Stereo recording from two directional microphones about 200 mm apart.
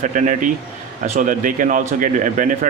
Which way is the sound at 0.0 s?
40° right (ahead or behind).